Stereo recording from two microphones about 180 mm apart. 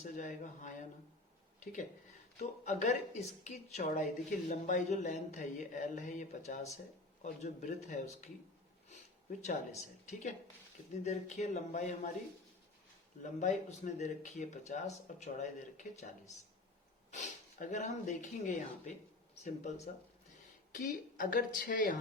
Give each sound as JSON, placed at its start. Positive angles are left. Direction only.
{"t": 0.0, "sound": "speech", "side_deg": 45}
{"t": 8.9, "sound": "a sound", "side_deg": 40}
{"t": 10.1, "sound": "speech", "side_deg": 40}
{"t": 13.4, "sound": "speech", "side_deg": 40}
{"t": 19.6, "sound": "speech", "side_deg": 40}
{"t": 20.7, "sound": "speech", "side_deg": 50}